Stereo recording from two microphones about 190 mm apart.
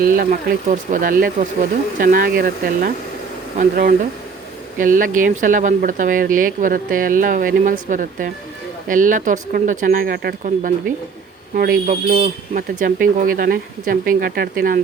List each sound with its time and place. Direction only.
0.0 s speech: 45° right (ahead or behind)